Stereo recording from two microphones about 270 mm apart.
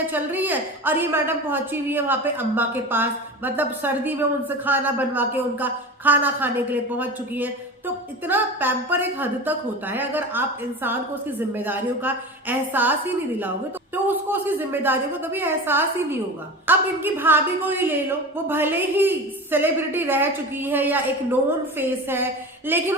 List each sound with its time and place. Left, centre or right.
0.1 s a woman's voice: centre